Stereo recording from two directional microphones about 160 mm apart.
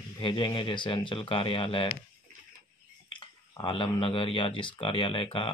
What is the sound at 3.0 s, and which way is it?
Speech, 30° left (ahead or behind).